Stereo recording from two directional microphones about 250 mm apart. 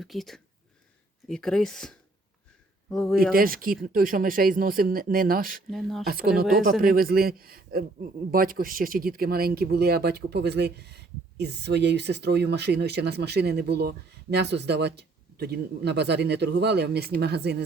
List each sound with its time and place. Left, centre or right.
0.0 s speech: centre
3.3 s speech: right
5.7 s speech: centre
6.1 s speech: right
6.4 s speech: centre
6.8 s speech: right